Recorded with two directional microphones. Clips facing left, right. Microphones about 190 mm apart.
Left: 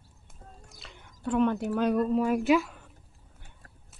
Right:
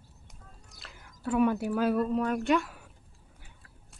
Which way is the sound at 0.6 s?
Centre (ahead or behind).